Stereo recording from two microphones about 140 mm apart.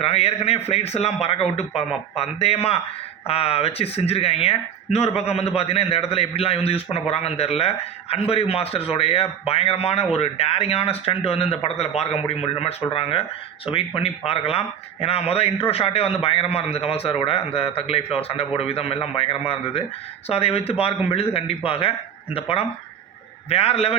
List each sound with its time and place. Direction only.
0.0 s speech: 45° left (ahead or behind)